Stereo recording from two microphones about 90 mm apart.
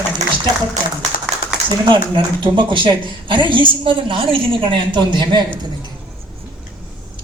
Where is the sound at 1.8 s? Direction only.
60° right (ahead or behind).